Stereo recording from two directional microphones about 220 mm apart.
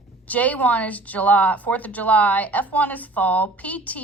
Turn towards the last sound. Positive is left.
turn(degrees=5)  # may be behind; listen again after turning